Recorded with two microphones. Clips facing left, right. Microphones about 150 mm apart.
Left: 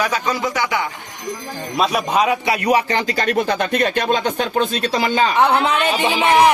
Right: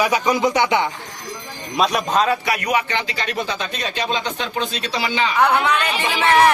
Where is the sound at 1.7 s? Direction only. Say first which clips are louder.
Even; 5° left (ahead or behind).